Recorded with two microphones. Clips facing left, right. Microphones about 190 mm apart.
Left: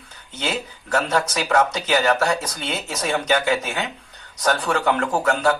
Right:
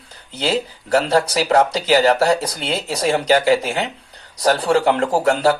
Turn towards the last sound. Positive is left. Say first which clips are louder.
# right 4 dB
turn(degrees=-35)  # may be behind; listen again after turning